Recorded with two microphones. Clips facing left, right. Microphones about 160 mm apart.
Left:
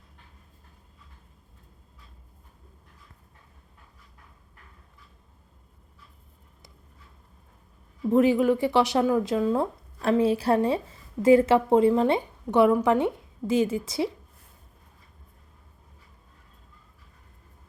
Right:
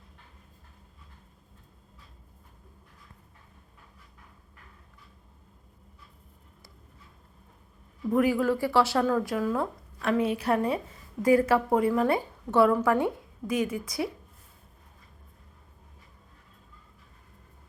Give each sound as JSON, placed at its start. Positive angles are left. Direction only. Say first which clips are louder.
{"t": 8.1, "sound": "a woman's voice", "louder": "left 4 dB", "side_deg": 25}